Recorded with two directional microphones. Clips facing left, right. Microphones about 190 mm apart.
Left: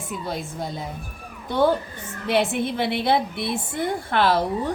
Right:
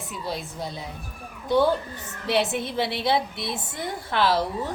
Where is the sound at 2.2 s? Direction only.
55° left (ahead or behind).